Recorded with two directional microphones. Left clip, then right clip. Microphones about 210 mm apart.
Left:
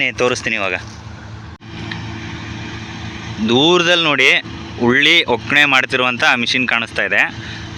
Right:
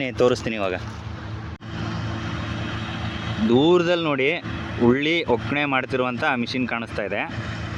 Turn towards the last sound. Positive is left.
turn(degrees=5)  # may be behind; listen again after turning